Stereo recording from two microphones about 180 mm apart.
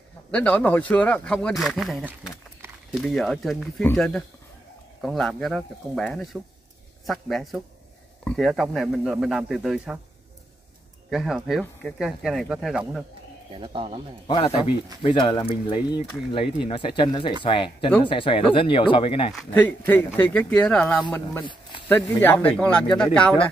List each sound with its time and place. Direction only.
0.3 s speech: 10° left (ahead or behind)
11.1 s speech: centre (ahead or behind)
13.6 s speech: 30° right (ahead or behind)
14.2 s speech: 30° left (ahead or behind)
19.3 s speech: 10° left (ahead or behind)